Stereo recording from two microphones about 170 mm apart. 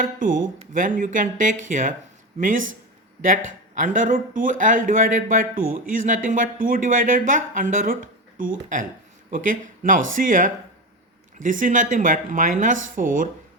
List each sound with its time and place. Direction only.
0.0 s speech: 55° right (ahead or behind)
3.8 s speech: 50° right (ahead or behind)